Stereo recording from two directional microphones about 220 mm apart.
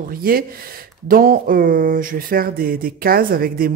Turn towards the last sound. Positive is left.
turn(degrees=-40)  # may be behind; listen again after turning